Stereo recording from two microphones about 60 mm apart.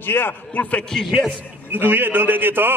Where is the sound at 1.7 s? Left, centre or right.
Right.